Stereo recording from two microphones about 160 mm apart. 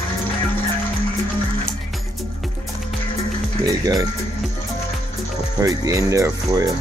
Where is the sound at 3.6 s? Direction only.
20° right (ahead or behind).